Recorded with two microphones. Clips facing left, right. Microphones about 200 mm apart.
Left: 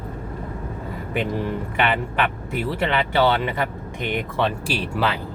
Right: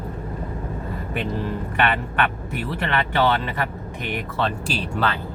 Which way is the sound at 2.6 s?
10° left (ahead or behind).